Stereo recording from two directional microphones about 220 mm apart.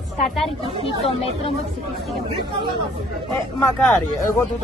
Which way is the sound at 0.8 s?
25° left (ahead or behind).